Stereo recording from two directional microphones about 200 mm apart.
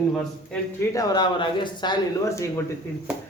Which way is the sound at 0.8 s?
15° left (ahead or behind).